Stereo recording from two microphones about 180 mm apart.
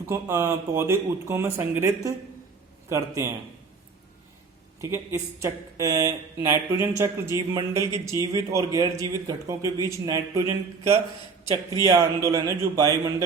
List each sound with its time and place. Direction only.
0.1 s speech: 15° right (ahead or behind)
4.8 s speech: 15° right (ahead or behind)